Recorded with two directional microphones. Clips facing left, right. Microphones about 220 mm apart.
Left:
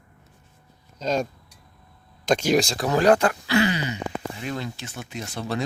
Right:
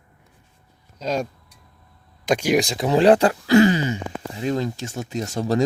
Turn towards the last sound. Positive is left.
turn(degrees=-40)  # may be behind; listen again after turning